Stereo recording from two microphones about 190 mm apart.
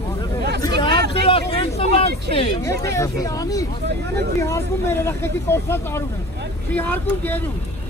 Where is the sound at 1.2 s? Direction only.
30° left (ahead or behind).